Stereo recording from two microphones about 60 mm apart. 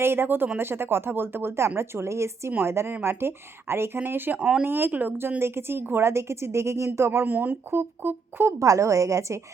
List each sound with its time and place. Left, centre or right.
0.0 s a woman's voice: right
4.4 s speech: centre
4.6 s speech: right
5.4 s a woman's voice: right
8.5 s a woman's voice: right